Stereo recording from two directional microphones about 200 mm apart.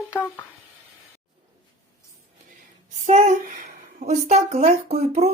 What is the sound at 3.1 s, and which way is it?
Speech, 35° right (ahead or behind).